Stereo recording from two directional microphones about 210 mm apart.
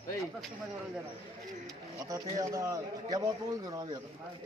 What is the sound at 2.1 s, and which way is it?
Speech, 15° right (ahead or behind).